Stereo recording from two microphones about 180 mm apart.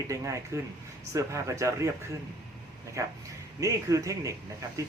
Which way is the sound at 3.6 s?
20° right (ahead or behind).